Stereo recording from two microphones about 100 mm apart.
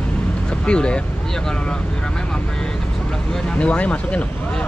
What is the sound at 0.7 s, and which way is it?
Speech, 10° left (ahead or behind).